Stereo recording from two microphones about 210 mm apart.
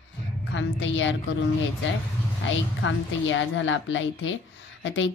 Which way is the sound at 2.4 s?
65° left (ahead or behind).